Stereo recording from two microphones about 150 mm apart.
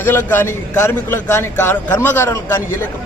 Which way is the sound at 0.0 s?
15° left (ahead or behind).